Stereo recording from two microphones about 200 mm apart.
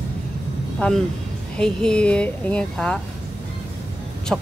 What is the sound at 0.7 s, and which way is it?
Speech, 5° left (ahead or behind).